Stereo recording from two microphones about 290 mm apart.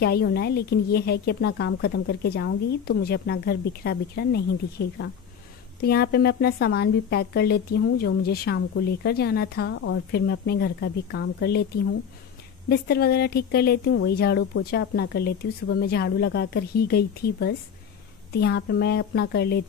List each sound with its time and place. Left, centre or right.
0.0 s a woman's voice: left
12.6 s a woman's voice: left